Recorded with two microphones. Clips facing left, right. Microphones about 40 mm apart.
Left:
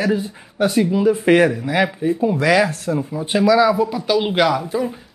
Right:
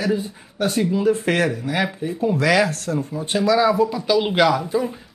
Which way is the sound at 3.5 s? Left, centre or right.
Centre.